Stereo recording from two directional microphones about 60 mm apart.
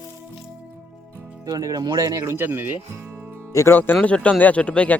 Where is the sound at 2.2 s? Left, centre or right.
Right.